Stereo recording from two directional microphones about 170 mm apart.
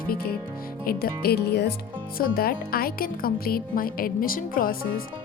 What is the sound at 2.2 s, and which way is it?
Speech, 60° left (ahead or behind).